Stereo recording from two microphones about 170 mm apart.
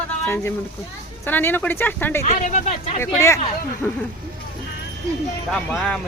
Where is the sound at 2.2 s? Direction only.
45° left (ahead or behind).